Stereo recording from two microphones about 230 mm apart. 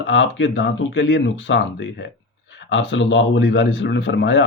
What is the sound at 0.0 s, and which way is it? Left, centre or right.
Speech, left.